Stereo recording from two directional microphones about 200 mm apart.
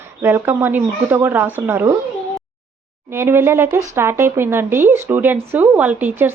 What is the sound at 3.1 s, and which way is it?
Speech, 10° right (ahead or behind).